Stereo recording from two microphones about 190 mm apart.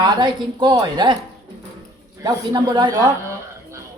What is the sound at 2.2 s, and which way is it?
A man's voice, 20° right (ahead or behind).